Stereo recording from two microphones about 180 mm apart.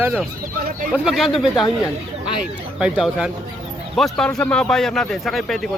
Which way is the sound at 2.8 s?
5° right (ahead or behind).